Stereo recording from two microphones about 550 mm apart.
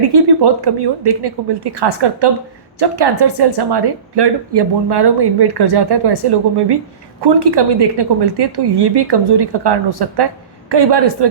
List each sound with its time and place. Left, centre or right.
0.3 s speech: right